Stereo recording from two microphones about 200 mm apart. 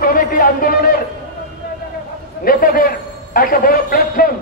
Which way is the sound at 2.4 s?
45° left (ahead or behind).